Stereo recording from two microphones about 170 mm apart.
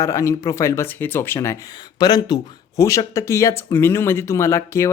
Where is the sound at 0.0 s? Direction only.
20° left (ahead or behind).